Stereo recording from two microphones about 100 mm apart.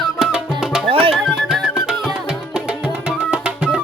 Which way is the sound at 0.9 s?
65° right (ahead or behind).